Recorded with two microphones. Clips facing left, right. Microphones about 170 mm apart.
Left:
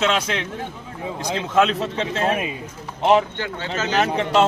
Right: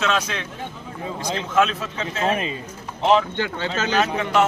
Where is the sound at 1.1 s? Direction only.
15° left (ahead or behind).